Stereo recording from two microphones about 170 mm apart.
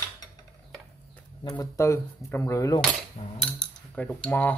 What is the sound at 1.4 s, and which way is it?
Speech, 20° left (ahead or behind).